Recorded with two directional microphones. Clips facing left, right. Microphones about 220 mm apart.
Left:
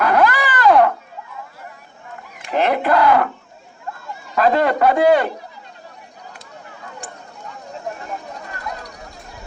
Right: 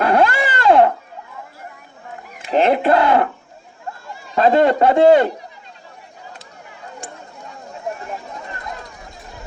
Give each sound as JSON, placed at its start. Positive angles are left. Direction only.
{"t": 0.0, "sound": "a sound", "side_deg": -30}
{"t": 2.5, "sound": "a man's voice", "side_deg": -25}
{"t": 4.4, "sound": "a man's voice", "side_deg": -25}